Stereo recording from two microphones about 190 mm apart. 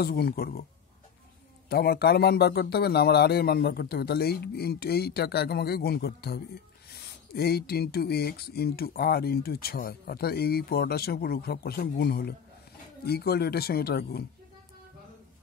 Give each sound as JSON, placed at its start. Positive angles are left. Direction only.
{"t": 0.0, "sound": "speech", "side_deg": 55}
{"t": 1.7, "sound": "a man's voice", "side_deg": 55}